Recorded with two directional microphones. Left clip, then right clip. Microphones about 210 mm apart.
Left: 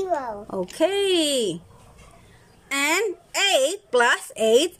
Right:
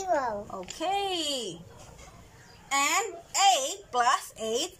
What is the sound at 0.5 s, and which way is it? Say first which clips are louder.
Speech: left 12 dB; 45° left (ahead or behind).